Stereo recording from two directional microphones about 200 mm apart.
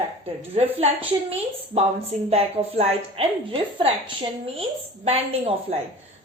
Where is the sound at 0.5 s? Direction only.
30° right (ahead or behind).